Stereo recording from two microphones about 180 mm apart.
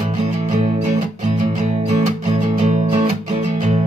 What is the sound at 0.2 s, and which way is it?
Music, 40° right (ahead or behind).